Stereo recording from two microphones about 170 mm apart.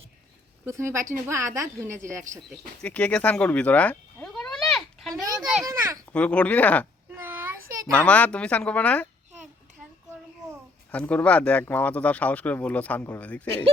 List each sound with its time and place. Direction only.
0.6 s a woman's voice: 15° right (ahead or behind)
2.8 s cat: 5° left (ahead or behind)
5.1 s a sound: 20° right (ahead or behind)
5.6 s a woman's voice: 15° right (ahead or behind)
6.1 s speech: 5° left (ahead or behind)
7.1 s child singing: 10° right (ahead or behind)
7.9 s speech: 5° left (ahead or behind)
10.9 s speech: 10° left (ahead or behind)